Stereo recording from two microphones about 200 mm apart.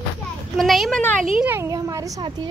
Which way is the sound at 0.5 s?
Centre (ahead or behind).